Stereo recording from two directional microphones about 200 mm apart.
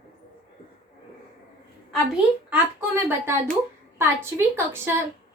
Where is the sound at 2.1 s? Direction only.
10° right (ahead or behind).